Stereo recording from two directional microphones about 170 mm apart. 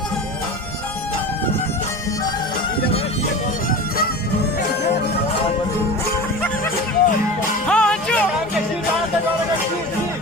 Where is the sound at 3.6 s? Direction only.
60° left (ahead or behind).